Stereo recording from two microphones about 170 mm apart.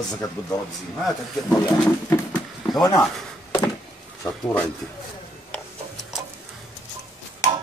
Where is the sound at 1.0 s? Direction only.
10° left (ahead or behind).